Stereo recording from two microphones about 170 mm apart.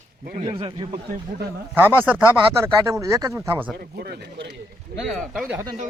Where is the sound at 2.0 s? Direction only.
10° right (ahead or behind).